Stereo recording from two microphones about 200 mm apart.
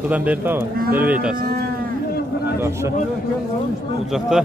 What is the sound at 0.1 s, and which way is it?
Speech, 5° right (ahead or behind).